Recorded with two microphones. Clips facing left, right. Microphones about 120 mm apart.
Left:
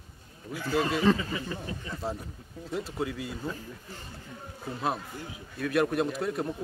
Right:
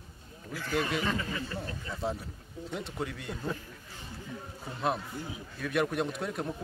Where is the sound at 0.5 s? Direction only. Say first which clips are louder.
Left 3 dB; 30° left (ahead or behind).